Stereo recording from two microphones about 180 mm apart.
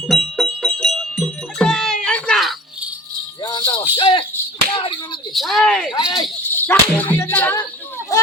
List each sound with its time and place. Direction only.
0.1 s music: centre (ahead or behind)
3.4 s music: 20° left (ahead or behind)
3.9 s speech: 25° left (ahead or behind)
5.3 s speech: centre (ahead or behind)
5.9 s speech: 25° left (ahead or behind)
6.4 s speech: 10° left (ahead or behind)
8.1 s a sound: 20° left (ahead or behind)